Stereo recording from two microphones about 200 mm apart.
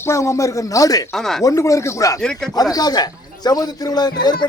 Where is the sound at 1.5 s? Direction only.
15° left (ahead or behind).